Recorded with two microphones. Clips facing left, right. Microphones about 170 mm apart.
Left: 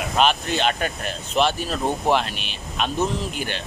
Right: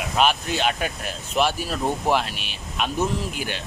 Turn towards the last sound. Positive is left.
turn(degrees=-10)  # may be behind; listen again after turning